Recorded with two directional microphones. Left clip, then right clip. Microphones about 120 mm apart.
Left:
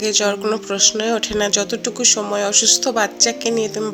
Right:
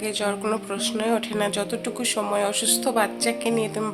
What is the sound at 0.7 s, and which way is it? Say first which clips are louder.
A woman's voice: left 9 dB; 30° left (ahead or behind).